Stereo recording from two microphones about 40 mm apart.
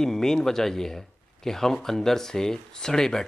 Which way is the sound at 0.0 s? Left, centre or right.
Centre.